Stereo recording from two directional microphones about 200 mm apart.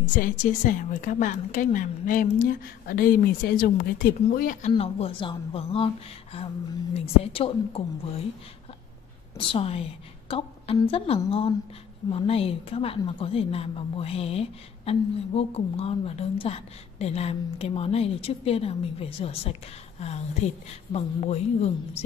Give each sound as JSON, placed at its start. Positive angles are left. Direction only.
{"t": 0.2, "sound": "a woman's voice", "side_deg": 40}
{"t": 9.4, "sound": "a woman's voice", "side_deg": 30}
{"t": 20.9, "sound": "a woman's voice", "side_deg": 30}